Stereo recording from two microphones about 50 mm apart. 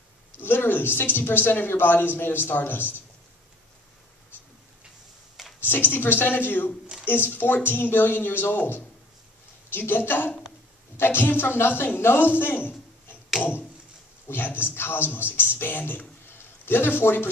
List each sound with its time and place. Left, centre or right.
0.4 s speech: left
5.6 s speech: left